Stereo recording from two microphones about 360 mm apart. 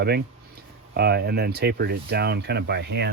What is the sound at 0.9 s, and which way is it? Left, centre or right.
Speech, right.